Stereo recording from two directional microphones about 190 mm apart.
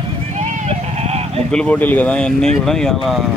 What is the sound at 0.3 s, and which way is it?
Sheep, 40° right (ahead or behind).